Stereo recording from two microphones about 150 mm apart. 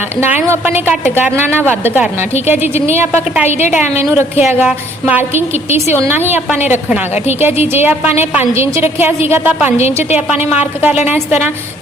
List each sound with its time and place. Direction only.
0.2 s a woman's voice: 15° right (ahead or behind)
9.7 s a woman's voice: 45° left (ahead or behind)
10.2 s a woman's voice: 10° right (ahead or behind)